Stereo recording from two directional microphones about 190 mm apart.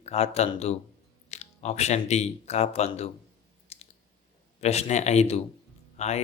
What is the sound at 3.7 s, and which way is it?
Clicking, 35° left (ahead or behind).